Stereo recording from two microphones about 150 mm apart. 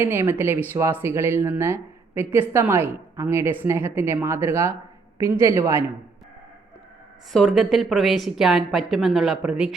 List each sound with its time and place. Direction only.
0.0 s a woman's voice: 15° right (ahead or behind)
7.3 s a woman's voice: centre (ahead or behind)